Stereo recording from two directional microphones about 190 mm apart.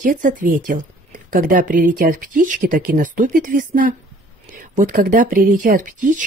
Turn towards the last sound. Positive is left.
turn(degrees=-45)  # may be behind; listen again after turning